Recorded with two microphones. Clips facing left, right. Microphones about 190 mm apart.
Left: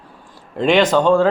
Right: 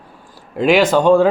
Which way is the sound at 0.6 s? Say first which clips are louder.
Right 1 dB; 5° right (ahead or behind).